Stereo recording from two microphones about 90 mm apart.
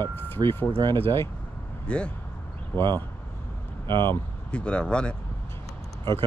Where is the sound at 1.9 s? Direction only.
10° left (ahead or behind).